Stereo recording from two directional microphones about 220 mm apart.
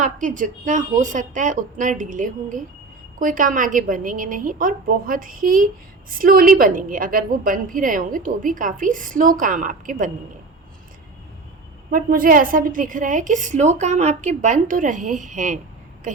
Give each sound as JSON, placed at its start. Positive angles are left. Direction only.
{"t": 0.0, "sound": "a woman's voice", "side_deg": -35}
{"t": 11.9, "sound": "a woman's voice", "side_deg": -40}